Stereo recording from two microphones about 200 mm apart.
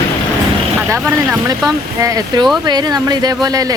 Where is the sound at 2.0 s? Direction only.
15° right (ahead or behind).